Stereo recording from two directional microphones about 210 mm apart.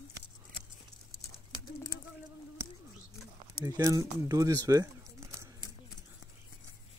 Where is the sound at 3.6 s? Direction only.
15° right (ahead or behind).